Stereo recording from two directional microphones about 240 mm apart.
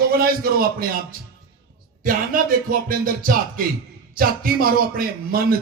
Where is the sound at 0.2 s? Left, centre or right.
Right.